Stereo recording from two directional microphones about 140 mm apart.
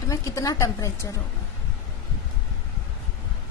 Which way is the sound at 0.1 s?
25° left (ahead or behind).